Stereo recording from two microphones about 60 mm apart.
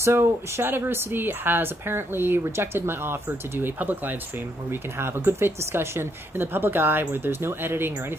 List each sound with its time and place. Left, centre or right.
0.0 s speech: right
4.6 s speech: right